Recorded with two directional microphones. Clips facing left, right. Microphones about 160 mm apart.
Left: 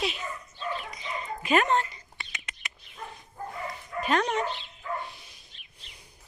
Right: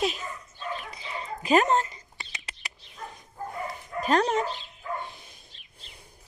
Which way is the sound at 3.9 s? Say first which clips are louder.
Right 3 dB; 35° right (ahead or behind).